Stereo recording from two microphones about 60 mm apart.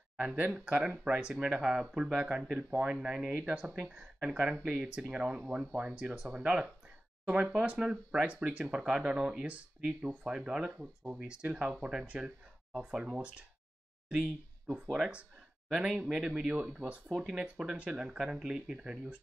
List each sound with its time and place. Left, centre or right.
0.2 s speech: centre
15.7 s speech: centre